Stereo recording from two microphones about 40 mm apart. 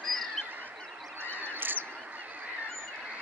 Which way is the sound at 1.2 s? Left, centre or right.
Right.